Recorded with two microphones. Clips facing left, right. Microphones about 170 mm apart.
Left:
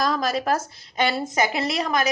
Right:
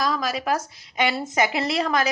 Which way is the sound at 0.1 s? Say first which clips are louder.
Left 2 dB; 10° right (ahead or behind).